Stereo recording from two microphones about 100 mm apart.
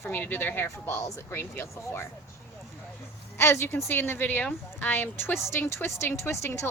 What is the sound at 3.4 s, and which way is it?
Speech, 25° left (ahead or behind).